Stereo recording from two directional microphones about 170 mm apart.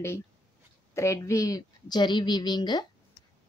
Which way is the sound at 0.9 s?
15° left (ahead or behind).